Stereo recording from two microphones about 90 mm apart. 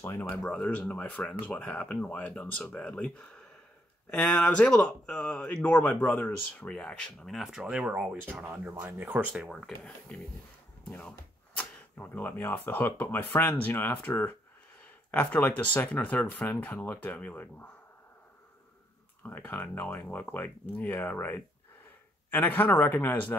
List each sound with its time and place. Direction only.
0.2 s speech: 15° left (ahead or behind)
7.7 s speech: 15° right (ahead or behind)
9.3 s speech: centre (ahead or behind); by 17.6 s 15° left (ahead or behind)
19.2 s speech: 20° left (ahead or behind)